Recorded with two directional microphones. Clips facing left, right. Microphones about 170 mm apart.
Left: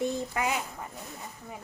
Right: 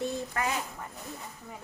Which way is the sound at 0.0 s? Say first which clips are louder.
Left 2 dB; 15° left (ahead or behind).